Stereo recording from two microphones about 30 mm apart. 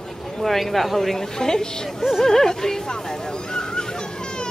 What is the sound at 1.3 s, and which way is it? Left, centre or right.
A woman's voice, left.